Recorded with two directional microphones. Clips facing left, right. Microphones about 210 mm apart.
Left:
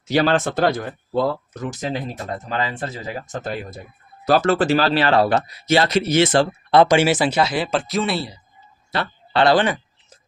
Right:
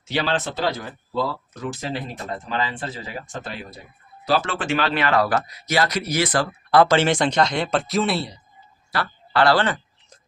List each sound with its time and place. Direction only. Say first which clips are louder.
0.0 s speech: left 6 dB; 45° left (ahead or behind); by 6.9 s 25° left (ahead or behind)
6.9 s speech: left 2 dB; 10° left (ahead or behind)
8.9 s a sound: left 1 dB; 20° left (ahead or behind)